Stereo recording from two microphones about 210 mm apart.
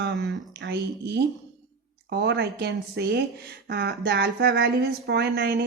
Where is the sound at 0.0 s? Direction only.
55° right (ahead or behind).